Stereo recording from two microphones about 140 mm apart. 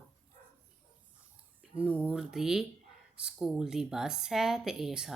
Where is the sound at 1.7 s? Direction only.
10° right (ahead or behind).